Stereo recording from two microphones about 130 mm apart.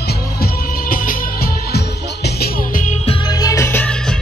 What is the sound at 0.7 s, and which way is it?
Music, 90° left.